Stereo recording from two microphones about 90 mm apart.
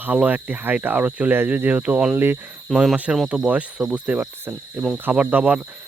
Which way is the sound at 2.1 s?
25° right (ahead or behind).